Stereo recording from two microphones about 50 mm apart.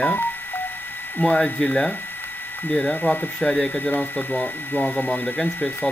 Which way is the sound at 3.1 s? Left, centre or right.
Left.